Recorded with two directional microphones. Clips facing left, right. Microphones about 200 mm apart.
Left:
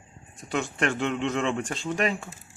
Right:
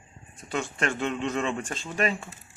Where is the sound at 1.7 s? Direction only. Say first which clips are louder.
Left 1 dB; 15° left (ahead or behind).